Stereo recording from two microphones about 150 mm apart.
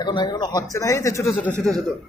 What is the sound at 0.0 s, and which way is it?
Speech, 30° left (ahead or behind).